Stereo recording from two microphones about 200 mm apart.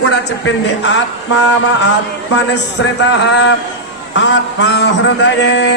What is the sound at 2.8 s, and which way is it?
A man's voice, 65° left (ahead or behind).